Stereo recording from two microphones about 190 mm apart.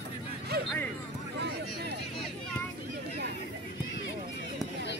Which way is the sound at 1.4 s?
60° right (ahead or behind).